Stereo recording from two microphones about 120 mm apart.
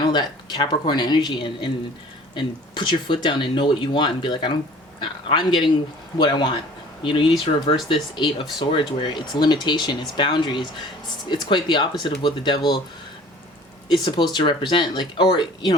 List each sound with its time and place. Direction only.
0.1 s speech: 35° left (ahead or behind)
13.8 s speech: 40° left (ahead or behind)